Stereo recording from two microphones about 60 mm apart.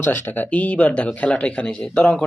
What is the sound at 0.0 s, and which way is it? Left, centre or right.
Speech, left.